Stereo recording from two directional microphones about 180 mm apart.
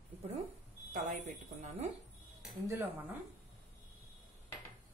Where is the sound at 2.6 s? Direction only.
15° right (ahead or behind).